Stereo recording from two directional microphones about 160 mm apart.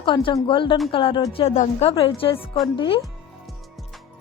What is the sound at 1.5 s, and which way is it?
Speech, 50° left (ahead or behind).